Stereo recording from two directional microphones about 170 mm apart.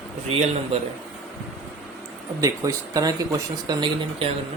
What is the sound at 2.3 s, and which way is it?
Speech, 20° right (ahead or behind).